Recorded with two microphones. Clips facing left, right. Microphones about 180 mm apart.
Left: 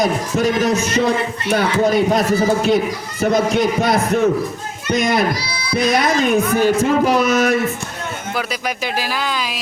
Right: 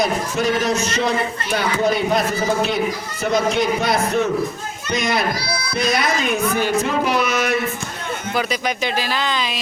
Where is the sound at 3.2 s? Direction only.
50° left (ahead or behind).